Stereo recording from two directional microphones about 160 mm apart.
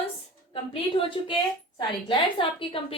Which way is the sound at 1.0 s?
30° left (ahead or behind).